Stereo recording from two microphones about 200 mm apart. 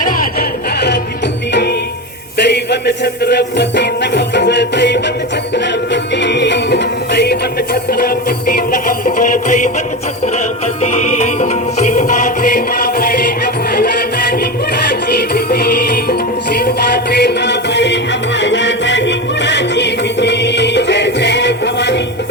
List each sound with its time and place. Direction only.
0.0 s music: 45° left (ahead or behind)
2.4 s music: 55° left (ahead or behind); by 9.6 s 40° left (ahead or behind)
10.9 s music: 35° left (ahead or behind); by 22.0 s 60° left (ahead or behind)